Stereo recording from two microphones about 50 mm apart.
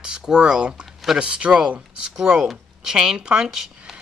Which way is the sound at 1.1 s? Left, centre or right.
Centre.